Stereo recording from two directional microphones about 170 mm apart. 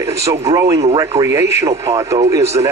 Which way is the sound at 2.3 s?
15° right (ahead or behind).